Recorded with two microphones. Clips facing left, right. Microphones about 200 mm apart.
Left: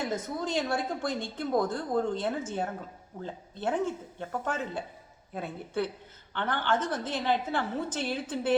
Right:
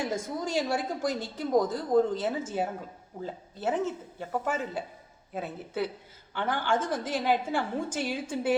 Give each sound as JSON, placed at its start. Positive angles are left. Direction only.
{"t": 0.0, "sound": "a woman's voice", "side_deg": -10}